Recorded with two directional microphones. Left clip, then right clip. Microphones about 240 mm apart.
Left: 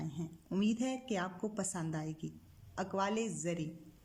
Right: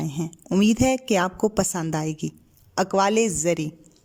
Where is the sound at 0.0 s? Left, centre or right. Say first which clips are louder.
Right 15 dB; right.